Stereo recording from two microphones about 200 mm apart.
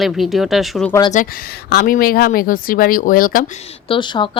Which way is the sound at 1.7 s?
45° left (ahead or behind).